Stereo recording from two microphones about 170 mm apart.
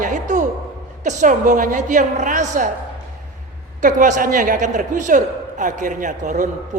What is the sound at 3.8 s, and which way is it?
A man's voice, 50° right (ahead or behind).